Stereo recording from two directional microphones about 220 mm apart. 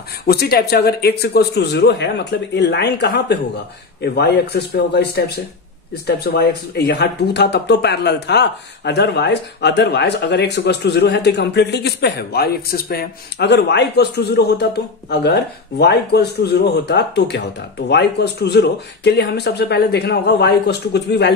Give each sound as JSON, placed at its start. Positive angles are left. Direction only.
{"t": 0.3, "sound": "speech", "side_deg": 45}